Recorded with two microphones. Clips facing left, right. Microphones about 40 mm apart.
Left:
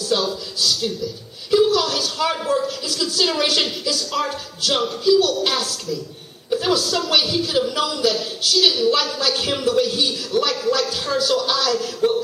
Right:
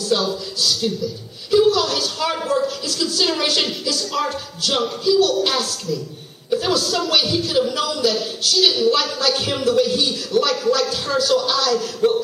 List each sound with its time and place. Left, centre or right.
0.0 s a woman's voice: centre